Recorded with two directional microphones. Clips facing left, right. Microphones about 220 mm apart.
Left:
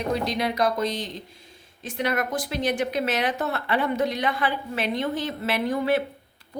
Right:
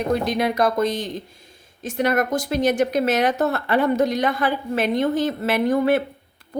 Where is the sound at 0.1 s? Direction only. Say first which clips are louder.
Right 4 dB; 50° right (ahead or behind).